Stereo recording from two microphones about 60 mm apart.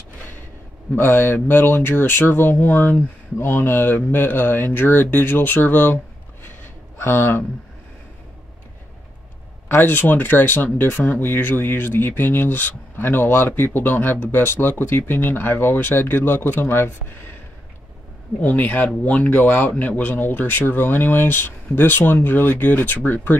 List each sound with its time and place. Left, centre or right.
0.9 s speech: left
6.6 s a sound: left
9.8 s speech: left
18.4 s speech: left